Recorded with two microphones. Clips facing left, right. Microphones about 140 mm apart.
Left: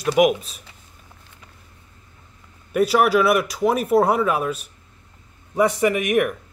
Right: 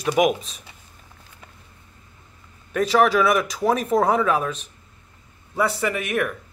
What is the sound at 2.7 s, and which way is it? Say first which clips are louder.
Speech: left 1 dB; 10° left (ahead or behind).